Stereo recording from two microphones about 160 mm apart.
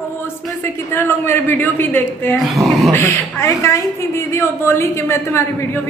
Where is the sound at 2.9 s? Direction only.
15° left (ahead or behind).